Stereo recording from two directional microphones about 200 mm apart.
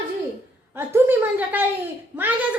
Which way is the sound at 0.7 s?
10° right (ahead or behind).